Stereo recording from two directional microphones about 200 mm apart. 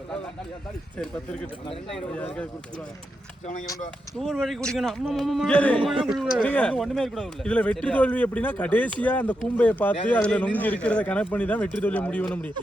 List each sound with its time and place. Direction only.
0.9 s a man's voice: 5° left (ahead or behind)
4.2 s a man's voice: centre (ahead or behind)
5.7 s a man's voice: 25° right (ahead or behind)
6.1 s speech: centre (ahead or behind)